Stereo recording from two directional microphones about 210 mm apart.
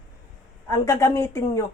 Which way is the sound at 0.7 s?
15° left (ahead or behind).